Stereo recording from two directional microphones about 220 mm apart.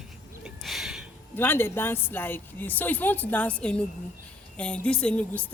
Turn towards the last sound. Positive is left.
turn(degrees=5)  # may be behind; listen again after turning